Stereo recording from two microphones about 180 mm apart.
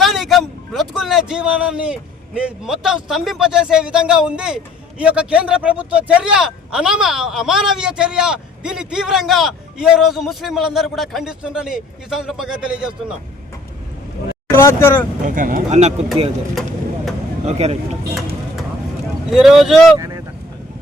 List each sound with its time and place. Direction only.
0.0 s speech: centre (ahead or behind)
14.5 s speech: 15° left (ahead or behind)
15.2 s speech: 45° right (ahead or behind)
17.4 s speech: 35° right (ahead or behind)
19.3 s speech: centre (ahead or behind)
20.0 s vehicle: 20° right (ahead or behind)